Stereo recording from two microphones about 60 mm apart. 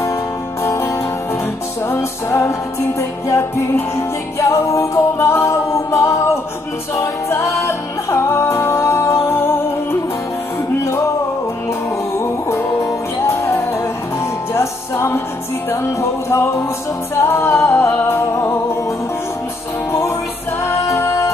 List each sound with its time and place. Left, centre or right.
0.7 s music: left
12.2 s music: left
19.9 s music: left